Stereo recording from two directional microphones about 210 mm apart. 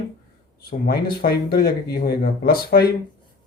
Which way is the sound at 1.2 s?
45° left (ahead or behind).